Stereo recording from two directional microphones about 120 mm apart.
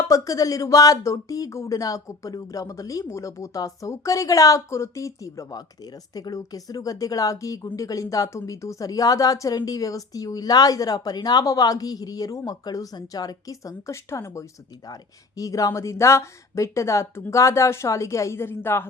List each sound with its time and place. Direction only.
0.0 s speech: 30° left (ahead or behind)